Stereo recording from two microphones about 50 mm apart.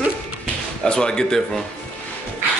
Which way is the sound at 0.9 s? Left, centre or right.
Centre.